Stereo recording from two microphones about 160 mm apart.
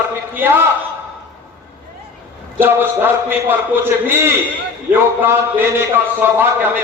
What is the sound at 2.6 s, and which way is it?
Speech, 15° right (ahead or behind).